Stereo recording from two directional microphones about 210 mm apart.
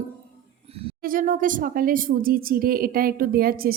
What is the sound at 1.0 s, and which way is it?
A woman's voice, 40° right (ahead or behind).